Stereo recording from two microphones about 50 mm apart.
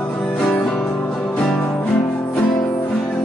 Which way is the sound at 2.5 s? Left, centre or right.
Centre.